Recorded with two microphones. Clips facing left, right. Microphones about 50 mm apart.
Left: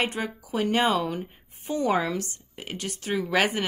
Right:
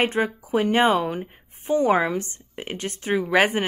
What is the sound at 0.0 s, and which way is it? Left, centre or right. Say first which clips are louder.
Speech: right 6 dB; right.